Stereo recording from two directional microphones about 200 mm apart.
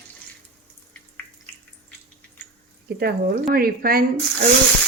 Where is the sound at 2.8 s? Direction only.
50° right (ahead or behind).